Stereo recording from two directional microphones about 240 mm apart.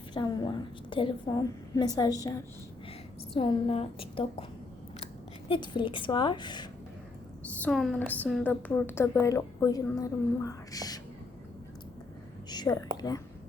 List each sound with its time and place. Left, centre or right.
0.1 s a woman's voice: centre
3.3 s a woman's voice: left
5.5 s a woman's voice: centre
7.6 s a woman's voice: centre
12.5 s a sound: centre
13.0 s a woman's voice: centre